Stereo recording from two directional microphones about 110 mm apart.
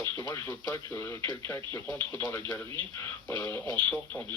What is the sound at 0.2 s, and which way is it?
Speech, 30° left (ahead or behind).